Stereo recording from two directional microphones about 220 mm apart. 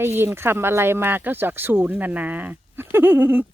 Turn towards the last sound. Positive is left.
turn(degrees=-10)  # may be behind; listen again after turning